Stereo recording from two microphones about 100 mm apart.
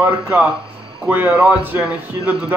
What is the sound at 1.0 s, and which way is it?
Speech, 15° right (ahead or behind).